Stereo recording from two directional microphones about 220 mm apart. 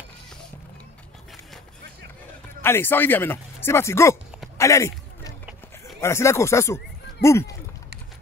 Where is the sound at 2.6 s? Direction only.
10° left (ahead or behind).